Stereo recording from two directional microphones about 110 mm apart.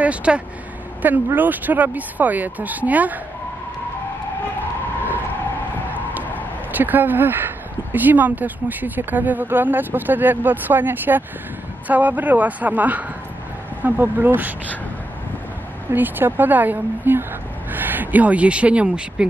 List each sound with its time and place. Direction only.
0.0 s speech: 10° right (ahead or behind)
6.7 s speech: 15° right (ahead or behind)
15.9 s speech: 20° right (ahead or behind)